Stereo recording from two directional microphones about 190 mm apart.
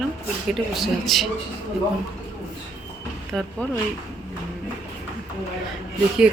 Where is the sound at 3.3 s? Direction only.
Centre (ahead or behind).